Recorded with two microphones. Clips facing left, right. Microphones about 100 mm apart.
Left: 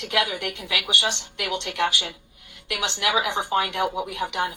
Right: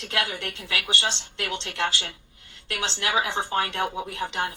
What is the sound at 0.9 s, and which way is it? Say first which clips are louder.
A woman's voice: left 1 dB; 30° right (ahead or behind).